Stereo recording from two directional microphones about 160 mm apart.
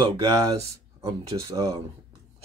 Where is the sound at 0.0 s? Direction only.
30° right (ahead or behind).